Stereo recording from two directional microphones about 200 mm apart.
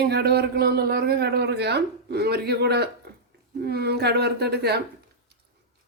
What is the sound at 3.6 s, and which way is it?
Speech, 55° right (ahead or behind).